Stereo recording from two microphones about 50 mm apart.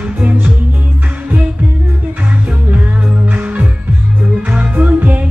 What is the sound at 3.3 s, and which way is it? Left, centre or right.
Music, right.